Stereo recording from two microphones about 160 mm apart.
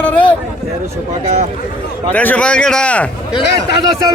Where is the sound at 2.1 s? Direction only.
10° left (ahead or behind).